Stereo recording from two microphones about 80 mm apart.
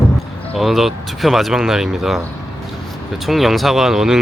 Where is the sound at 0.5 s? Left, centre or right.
Centre.